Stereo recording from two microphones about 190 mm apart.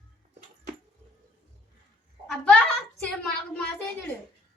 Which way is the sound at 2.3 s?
5° left (ahead or behind).